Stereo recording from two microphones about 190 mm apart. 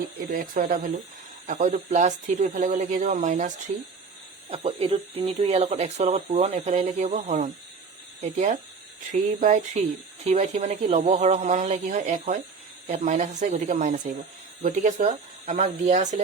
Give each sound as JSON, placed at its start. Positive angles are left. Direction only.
{"t": 0.3, "sound": "speech", "side_deg": -45}